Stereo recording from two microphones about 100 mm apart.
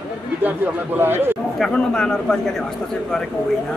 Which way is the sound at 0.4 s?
20° right (ahead or behind).